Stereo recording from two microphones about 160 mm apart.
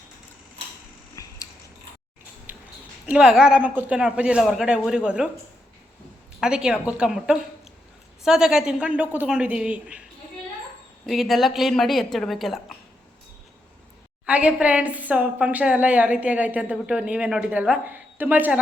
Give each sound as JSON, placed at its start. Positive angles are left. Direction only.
{"t": 1.2, "sound": "biting", "side_deg": 20}
{"t": 2.5, "sound": "a sound", "side_deg": -10}
{"t": 3.1, "sound": "a woman's voice", "side_deg": -5}
{"t": 6.4, "sound": "a woman's voice", "side_deg": -5}
{"t": 11.0, "sound": "a woman's voice", "side_deg": 0}
{"t": 14.3, "sound": "a woman's voice", "side_deg": -10}